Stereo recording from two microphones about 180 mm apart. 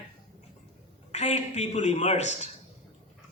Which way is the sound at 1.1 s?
40° left (ahead or behind).